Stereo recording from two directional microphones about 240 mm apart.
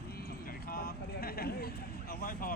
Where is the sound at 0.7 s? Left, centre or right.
Left.